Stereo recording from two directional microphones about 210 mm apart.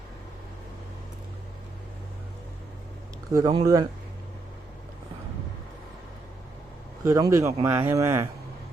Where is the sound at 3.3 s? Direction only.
20° right (ahead or behind).